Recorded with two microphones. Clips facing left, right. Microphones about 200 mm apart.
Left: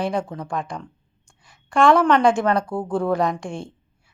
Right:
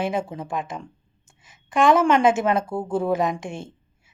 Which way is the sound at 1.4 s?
Centre (ahead or behind).